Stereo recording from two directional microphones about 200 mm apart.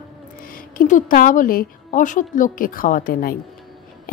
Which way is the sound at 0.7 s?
40° left (ahead or behind).